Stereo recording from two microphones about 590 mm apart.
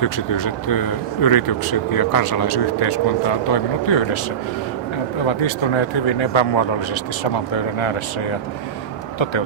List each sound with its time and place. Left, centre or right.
0.0 s speech: left
5.2 s speech: left
9.1 s speech: left